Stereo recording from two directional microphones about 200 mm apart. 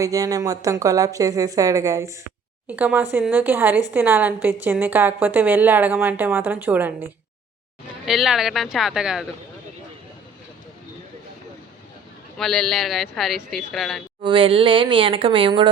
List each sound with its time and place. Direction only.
0.0 s a woman's voice: 15° right (ahead or behind)
12.4 s speech: centre (ahead or behind)
14.2 s speech: 25° right (ahead or behind)